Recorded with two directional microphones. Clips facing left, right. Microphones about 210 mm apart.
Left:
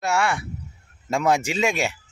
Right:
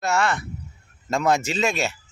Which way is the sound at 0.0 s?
10° left (ahead or behind).